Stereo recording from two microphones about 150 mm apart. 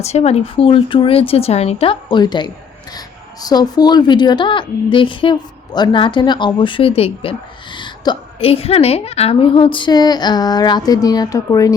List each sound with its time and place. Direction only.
0.0 s a woman's voice: 45° left (ahead or behind); by 11.7 s 25° left (ahead or behind)